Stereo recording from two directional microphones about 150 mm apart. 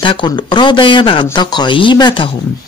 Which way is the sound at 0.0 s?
30° left (ahead or behind).